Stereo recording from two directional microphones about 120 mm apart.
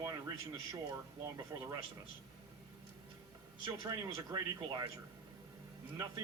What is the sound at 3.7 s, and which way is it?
Speech, 30° right (ahead or behind).